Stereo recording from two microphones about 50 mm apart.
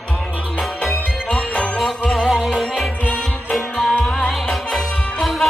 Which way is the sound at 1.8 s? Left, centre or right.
Centre.